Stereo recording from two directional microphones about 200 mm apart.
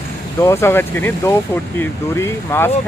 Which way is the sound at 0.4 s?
15° left (ahead or behind).